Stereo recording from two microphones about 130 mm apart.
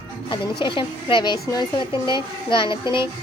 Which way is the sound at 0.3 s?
40° left (ahead or behind).